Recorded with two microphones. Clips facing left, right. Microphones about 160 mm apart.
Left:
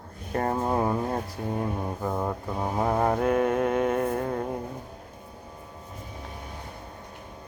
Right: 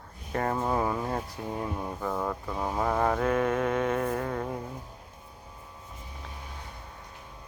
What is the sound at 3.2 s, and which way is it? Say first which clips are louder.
Mantra: left 3 dB; 10° left (ahead or behind).